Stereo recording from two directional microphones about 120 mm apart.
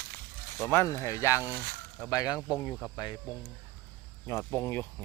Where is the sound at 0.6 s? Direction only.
20° left (ahead or behind).